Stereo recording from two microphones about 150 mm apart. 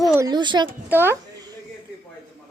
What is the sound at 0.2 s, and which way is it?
Speech, 30° right (ahead or behind).